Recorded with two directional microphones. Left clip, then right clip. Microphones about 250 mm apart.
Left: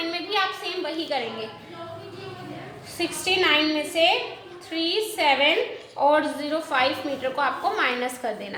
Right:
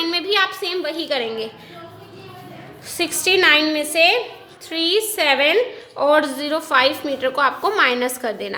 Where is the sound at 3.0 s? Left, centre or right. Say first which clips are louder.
Right 6 dB; right.